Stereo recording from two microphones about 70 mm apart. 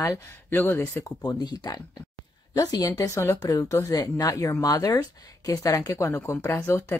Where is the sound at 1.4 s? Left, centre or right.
Left.